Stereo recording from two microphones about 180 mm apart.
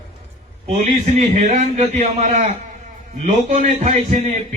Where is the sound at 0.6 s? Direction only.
35° right (ahead or behind).